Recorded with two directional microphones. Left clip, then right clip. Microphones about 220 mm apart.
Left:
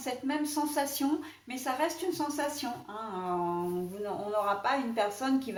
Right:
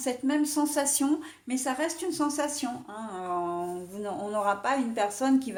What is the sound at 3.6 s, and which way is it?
A woman's voice, 45° right (ahead or behind).